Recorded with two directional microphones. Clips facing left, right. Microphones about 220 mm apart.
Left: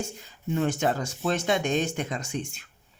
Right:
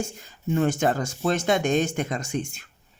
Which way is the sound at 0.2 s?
50° right (ahead or behind).